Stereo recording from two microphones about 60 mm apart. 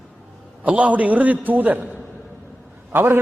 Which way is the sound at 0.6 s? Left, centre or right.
Right.